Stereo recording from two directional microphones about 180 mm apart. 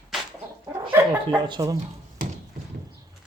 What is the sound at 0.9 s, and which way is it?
Dog, 10° right (ahead or behind).